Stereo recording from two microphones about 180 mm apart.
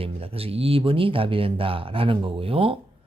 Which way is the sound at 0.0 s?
30° right (ahead or behind).